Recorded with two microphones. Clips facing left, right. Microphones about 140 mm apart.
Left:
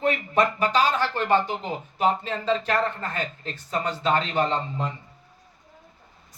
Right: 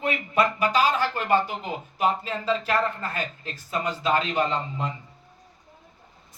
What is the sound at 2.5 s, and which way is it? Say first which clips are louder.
Speech: left 1 dB; 40° left (ahead or behind).